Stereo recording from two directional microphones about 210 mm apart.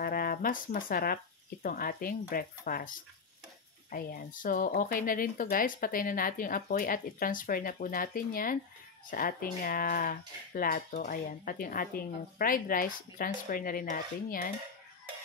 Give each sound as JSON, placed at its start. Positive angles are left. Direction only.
{"t": 0.0, "sound": "speech", "side_deg": 45}
{"t": 3.9, "sound": "speech", "side_deg": 40}